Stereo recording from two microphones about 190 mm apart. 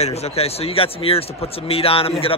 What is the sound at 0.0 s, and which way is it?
A man's voice, 35° left (ahead or behind).